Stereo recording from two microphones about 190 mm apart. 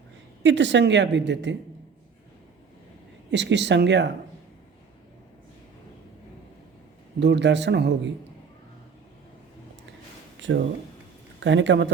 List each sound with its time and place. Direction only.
0.4 s a woman's voice: 70° right (ahead or behind)
3.3 s a woman's voice: 65° right (ahead or behind)
7.2 s a woman's voice: 65° right (ahead or behind)
10.5 s speech: 65° right (ahead or behind)